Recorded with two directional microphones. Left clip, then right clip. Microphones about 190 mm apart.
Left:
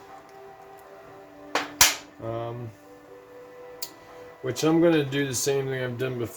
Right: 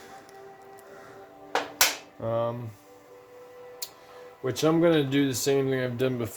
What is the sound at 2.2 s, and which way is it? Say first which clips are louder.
Speech: right 5 dB; 50° right (ahead or behind).